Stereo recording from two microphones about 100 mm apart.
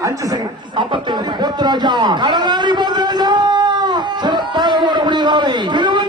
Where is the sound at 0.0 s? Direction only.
35° right (ahead or behind).